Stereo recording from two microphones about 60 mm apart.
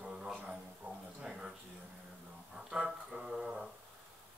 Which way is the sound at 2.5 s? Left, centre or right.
Centre.